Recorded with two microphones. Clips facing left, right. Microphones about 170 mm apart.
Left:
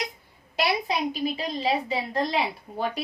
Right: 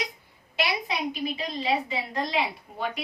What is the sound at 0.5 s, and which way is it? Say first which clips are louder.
A woman's voice: left 3 dB; 40° left (ahead or behind).